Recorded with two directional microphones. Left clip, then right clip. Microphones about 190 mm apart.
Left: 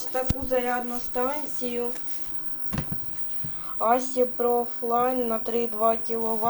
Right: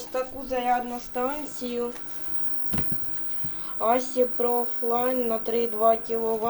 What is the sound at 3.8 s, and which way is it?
Speech, 10° right (ahead or behind).